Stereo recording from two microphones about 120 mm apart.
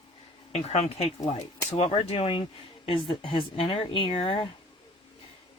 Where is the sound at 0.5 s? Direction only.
65° left (ahead or behind).